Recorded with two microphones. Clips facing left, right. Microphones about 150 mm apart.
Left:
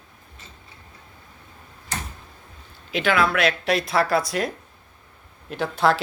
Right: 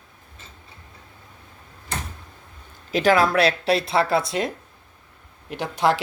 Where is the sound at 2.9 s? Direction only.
40° right (ahead or behind).